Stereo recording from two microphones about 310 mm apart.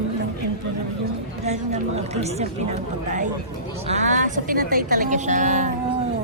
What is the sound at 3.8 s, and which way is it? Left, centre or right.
Speech, right.